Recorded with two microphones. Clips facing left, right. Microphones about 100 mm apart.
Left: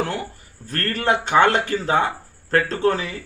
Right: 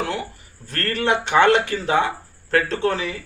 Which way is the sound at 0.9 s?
40° left (ahead or behind).